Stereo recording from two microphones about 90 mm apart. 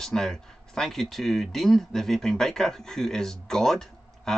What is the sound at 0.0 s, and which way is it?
Speech, 5° left (ahead or behind).